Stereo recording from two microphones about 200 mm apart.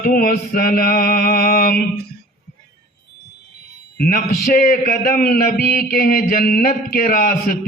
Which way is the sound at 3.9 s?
45° left (ahead or behind).